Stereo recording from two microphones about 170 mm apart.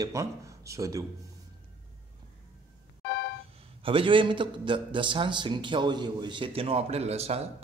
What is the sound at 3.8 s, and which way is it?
A man's voice, 30° right (ahead or behind).